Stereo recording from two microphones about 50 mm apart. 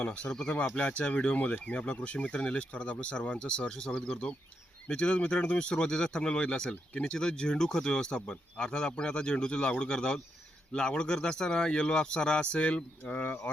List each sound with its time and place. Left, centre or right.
0.0 s speech: left
0.3 s speech: centre
3.7 s speech: centre; by 13.4 s left